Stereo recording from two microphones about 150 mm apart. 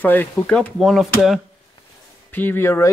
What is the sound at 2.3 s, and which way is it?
Speech, 15° left (ahead or behind).